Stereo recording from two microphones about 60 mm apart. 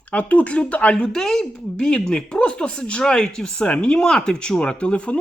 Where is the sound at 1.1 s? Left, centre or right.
Centre.